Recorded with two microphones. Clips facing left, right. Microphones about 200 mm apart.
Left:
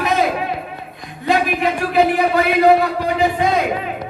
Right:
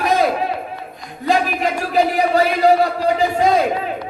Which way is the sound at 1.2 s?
35° right (ahead or behind).